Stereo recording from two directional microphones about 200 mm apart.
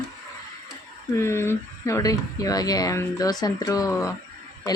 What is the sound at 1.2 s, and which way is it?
Speech, 15° left (ahead or behind).